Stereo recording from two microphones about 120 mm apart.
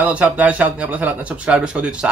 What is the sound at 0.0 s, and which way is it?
Speech, 10° right (ahead or behind).